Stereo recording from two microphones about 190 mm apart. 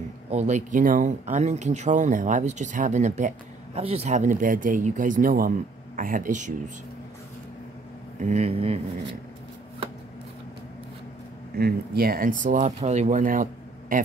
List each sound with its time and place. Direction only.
0.3 s speech: 35° right (ahead or behind)
8.2 s speech: 35° right (ahead or behind)
11.5 s speech: 55° right (ahead or behind)